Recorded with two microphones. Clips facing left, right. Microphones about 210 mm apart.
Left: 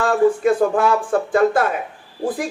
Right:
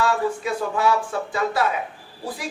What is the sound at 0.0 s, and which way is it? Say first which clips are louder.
A man's voice: left 7 dB; 50° left (ahead or behind).